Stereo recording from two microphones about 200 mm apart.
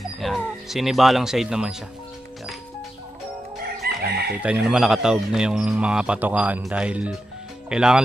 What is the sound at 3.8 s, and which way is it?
Chicken, 50° right (ahead or behind).